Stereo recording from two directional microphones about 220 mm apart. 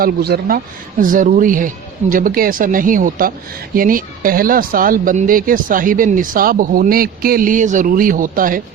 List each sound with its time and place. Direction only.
0.0 s speech: 45° right (ahead or behind)